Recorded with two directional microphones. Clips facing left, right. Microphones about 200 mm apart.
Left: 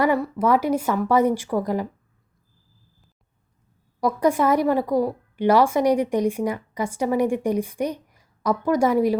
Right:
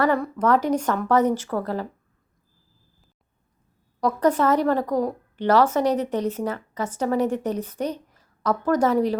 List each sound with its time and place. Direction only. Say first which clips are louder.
0.0 s a woman's voice: left 1 dB; 10° left (ahead or behind)
4.0 s a woman's voice: even; 10° left (ahead or behind)